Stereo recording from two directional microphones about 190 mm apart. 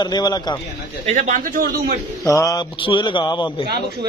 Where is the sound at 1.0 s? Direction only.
40° right (ahead or behind).